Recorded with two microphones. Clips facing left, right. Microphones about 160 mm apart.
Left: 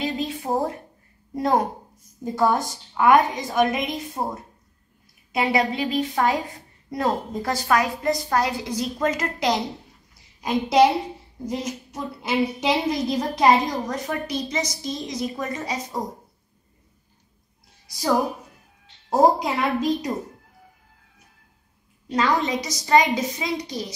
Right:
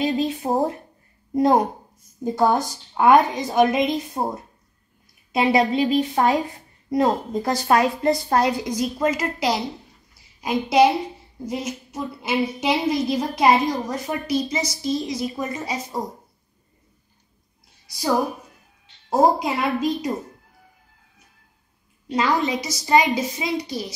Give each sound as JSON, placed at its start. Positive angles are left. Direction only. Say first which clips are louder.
{"t": 0.0, "sound": "a woman's voice", "louder": "right 5 dB", "side_deg": -25}
{"t": 5.3, "sound": "a woman's voice", "louder": "right 4 dB", "side_deg": -25}
{"t": 19.0, "sound": "a woman's voice", "louder": "even", "side_deg": -5}
{"t": 22.1, "sound": "a woman's voice", "louder": "right 1 dB", "side_deg": -10}